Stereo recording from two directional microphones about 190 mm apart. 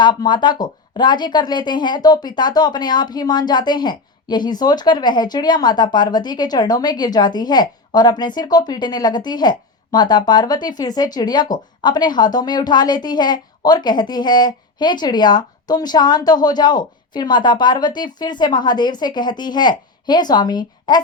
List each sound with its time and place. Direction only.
0.0 s speech: 25° left (ahead or behind)